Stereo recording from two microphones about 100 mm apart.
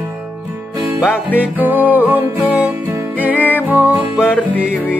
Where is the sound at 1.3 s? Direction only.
15° right (ahead or behind).